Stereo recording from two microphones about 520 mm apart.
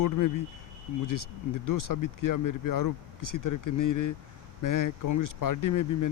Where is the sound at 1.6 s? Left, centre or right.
Left.